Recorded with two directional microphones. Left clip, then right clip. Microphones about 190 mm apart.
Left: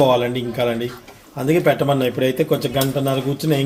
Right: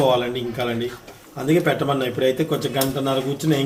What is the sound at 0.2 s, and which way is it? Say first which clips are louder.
A man's voice: left 3 dB; 45° left (ahead or behind).